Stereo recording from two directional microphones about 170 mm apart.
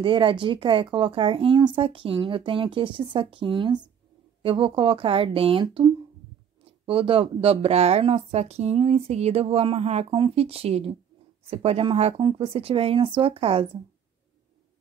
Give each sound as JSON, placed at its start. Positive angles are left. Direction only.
{"t": 0.0, "sound": "speech", "side_deg": -30}